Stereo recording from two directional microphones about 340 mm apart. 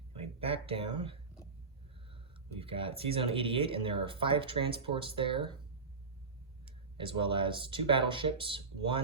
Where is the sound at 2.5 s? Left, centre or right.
Centre.